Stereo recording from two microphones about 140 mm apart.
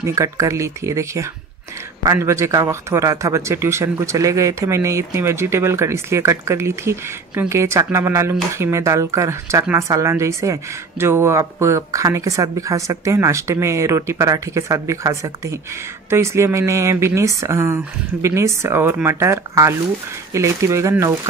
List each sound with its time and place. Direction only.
0.0 s speech: 20° right (ahead or behind)